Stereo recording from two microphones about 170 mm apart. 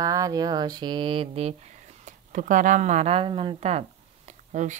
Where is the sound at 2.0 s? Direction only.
50° right (ahead or behind).